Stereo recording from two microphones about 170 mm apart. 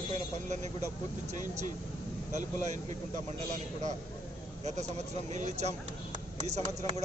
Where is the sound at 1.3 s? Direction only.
45° right (ahead or behind).